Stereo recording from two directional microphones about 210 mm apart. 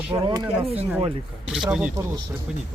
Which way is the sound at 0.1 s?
25° right (ahead or behind).